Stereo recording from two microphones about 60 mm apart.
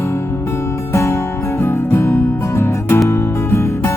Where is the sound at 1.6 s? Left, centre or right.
Left.